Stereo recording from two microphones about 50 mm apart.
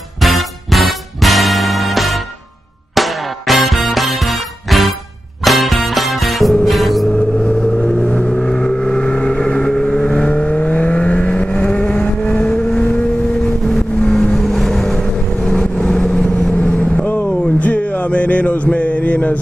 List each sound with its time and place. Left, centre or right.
0.2 s music: centre
7.1 s vehicle: centre
14.3 s vehicle: centre
16.6 s vehicle: left